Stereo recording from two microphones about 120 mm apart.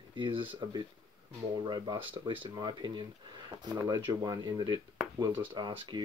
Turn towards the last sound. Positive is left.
turn(degrees=-35)  # may be behind; listen again after turning